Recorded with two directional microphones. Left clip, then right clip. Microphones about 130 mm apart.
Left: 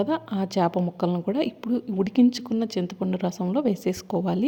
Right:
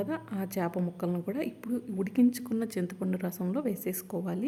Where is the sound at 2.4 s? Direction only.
15° left (ahead or behind).